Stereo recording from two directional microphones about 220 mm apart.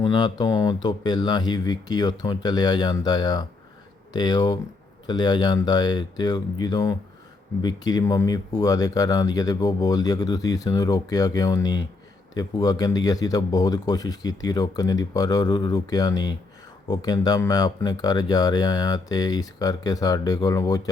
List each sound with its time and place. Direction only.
0.0 s speech: 20° left (ahead or behind)